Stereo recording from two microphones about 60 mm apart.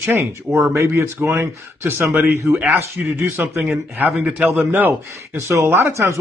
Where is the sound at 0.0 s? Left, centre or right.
Right.